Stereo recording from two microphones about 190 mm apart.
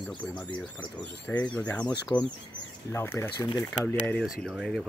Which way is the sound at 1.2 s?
5° left (ahead or behind).